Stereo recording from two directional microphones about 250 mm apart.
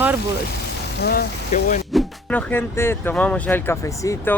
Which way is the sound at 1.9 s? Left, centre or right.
Centre.